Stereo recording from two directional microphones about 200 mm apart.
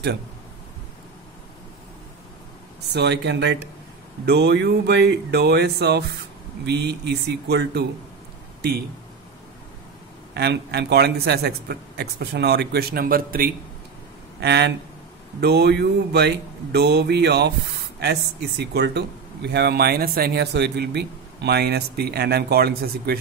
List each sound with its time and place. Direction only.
2.9 s speech: 60° right (ahead or behind)
10.3 s speech: 55° right (ahead or behind)
14.4 s speech: 55° right (ahead or behind)